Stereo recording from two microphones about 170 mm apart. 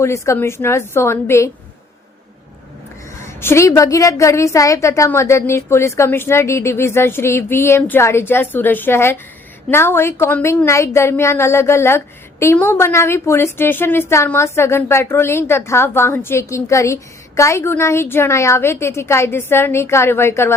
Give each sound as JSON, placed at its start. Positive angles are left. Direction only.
{"t": 0.0, "sound": "a woman's voice", "side_deg": 15}
{"t": 3.2, "sound": "a woman's voice", "side_deg": 15}